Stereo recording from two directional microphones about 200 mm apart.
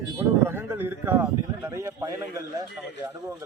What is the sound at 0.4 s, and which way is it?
A man's voice, 10° right (ahead or behind).